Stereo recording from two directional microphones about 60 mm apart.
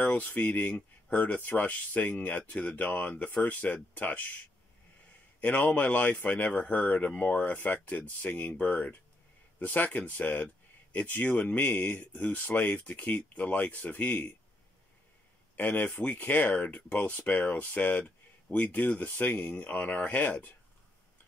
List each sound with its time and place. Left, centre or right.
0.0 s speech: left
5.6 s speech: left
15.5 s speech: left